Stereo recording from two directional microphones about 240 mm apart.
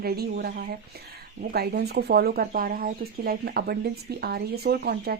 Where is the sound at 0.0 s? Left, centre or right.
Right.